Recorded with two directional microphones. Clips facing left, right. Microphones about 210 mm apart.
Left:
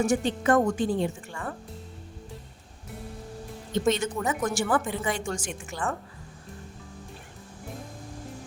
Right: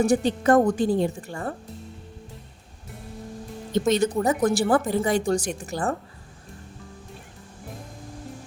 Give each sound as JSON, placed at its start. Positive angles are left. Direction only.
{"t": 0.0, "sound": "a woman's voice", "side_deg": -35}
{"t": 3.9, "sound": "a woman's voice", "side_deg": -35}